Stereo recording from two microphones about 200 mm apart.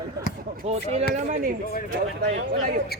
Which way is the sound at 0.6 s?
35° right (ahead or behind).